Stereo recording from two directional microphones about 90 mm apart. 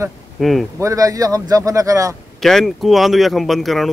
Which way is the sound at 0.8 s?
35° right (ahead or behind).